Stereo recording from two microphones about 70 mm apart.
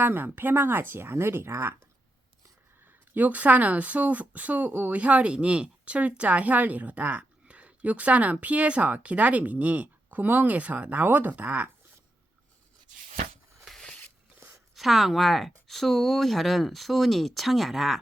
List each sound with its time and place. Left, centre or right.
0.0 s speech: right
3.2 s speech: right
13.7 s a sound: centre
14.8 s speech: centre